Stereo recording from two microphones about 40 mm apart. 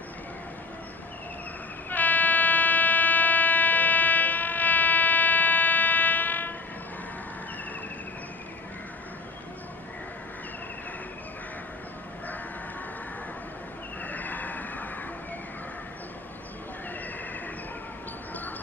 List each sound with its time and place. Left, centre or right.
1.9 s train: left
14.0 s vehicle: left